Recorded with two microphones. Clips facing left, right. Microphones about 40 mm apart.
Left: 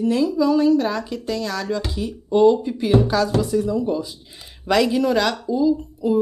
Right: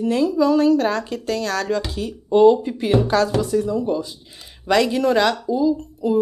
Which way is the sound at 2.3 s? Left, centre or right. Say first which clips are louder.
Right 2 dB; centre.